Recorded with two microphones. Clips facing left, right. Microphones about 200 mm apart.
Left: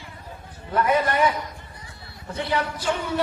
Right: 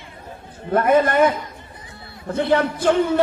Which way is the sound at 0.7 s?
50° right (ahead or behind).